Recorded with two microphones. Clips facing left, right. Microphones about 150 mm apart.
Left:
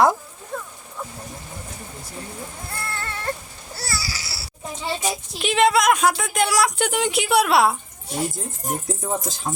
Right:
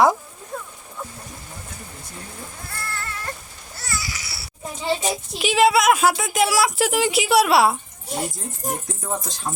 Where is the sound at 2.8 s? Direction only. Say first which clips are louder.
Even; 25° left (ahead or behind).